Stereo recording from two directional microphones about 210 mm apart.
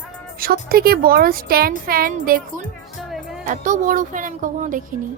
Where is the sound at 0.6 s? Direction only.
45° right (ahead or behind).